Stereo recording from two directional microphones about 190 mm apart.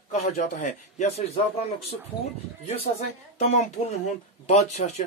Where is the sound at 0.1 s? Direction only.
35° left (ahead or behind).